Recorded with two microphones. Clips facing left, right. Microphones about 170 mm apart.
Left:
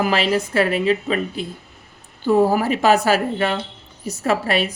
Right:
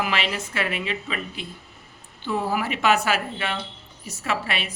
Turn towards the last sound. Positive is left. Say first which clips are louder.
# left 8 dB
turn(degrees=40)  # may be behind; listen again after turning